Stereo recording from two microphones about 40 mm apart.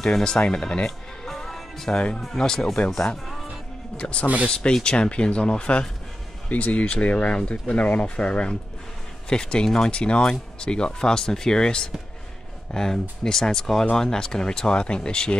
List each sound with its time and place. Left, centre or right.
0.0 s speech: centre
0.8 s music: centre
2.0 s speech: left
2.2 s speech: centre
3.9 s speech: left